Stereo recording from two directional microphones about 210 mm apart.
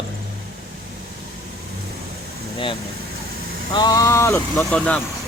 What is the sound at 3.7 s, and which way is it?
Speech, 20° left (ahead or behind).